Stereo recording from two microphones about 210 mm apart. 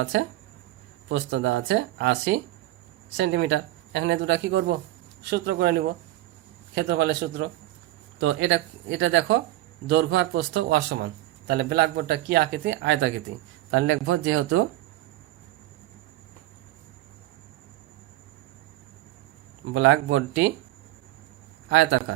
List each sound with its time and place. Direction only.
0.0 s a man's voice: 65° right (ahead or behind); by 14.6 s 90° right
19.7 s speech: 70° right (ahead or behind)
21.7 s speech: 65° right (ahead or behind)